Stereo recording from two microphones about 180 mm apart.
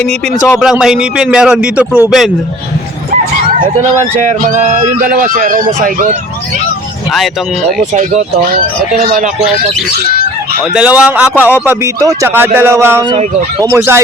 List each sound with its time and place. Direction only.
0.6 s a man's voice: 5° right (ahead or behind)
4.1 s speech: 45° right (ahead or behind)
9.0 s speech: 55° right (ahead or behind)
10.8 s speech: 5° right (ahead or behind)